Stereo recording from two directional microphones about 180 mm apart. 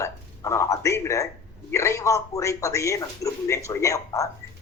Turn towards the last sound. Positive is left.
turn(degrees=15)  # may be behind; listen again after turning